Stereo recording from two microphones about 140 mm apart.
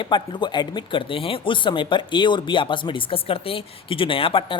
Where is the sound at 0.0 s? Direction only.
35° left (ahead or behind).